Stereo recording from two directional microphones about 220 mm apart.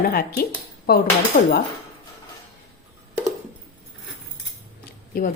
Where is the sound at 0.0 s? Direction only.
45° left (ahead or behind).